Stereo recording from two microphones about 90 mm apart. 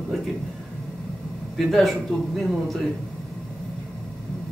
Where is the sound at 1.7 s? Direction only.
Centre (ahead or behind).